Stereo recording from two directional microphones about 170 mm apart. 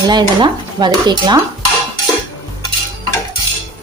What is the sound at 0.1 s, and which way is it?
Stir, 25° right (ahead or behind).